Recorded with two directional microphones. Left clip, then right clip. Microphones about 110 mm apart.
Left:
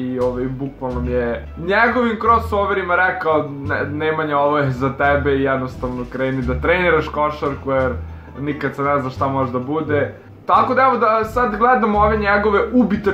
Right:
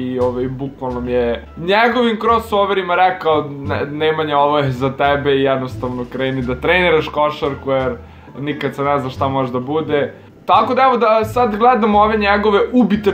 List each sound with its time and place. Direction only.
1.1 s speech: 45° right (ahead or behind)